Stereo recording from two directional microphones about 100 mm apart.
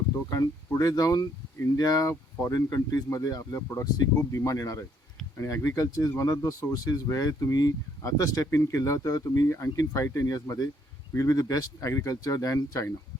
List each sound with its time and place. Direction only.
0.3 s speech: 35° left (ahead or behind)